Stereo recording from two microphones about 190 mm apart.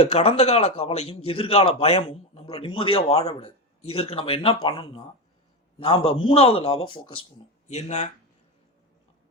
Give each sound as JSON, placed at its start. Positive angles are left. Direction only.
{"t": 0.0, "sound": "a man's voice", "side_deg": 30}